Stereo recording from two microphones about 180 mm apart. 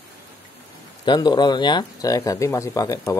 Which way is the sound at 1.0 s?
25° left (ahead or behind).